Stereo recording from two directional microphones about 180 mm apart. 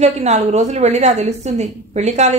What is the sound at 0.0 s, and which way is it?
A woman's voice, 40° right (ahead or behind).